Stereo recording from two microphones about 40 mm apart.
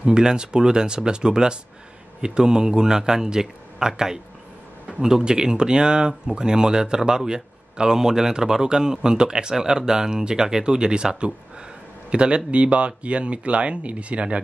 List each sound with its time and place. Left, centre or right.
0.0 s a man's voice: right